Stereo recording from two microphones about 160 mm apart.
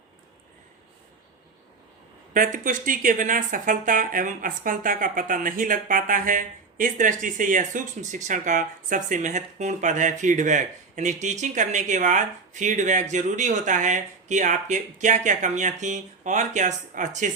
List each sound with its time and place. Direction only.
2.3 s speech: 55° right (ahead or behind)